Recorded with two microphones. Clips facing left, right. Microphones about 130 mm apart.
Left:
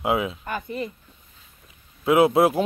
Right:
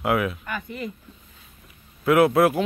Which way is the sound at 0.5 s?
35° left (ahead or behind).